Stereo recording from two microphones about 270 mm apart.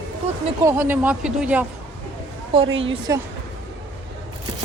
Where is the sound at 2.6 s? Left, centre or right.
Right.